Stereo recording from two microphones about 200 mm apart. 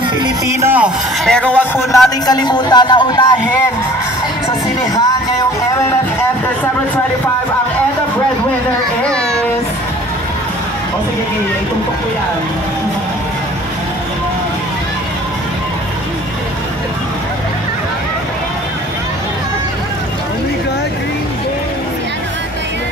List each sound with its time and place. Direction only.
0.2 s a man's voice: 15° right (ahead or behind); by 3.3 s 20° left (ahead or behind)